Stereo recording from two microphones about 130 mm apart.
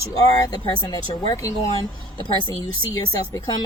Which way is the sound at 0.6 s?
35° left (ahead or behind).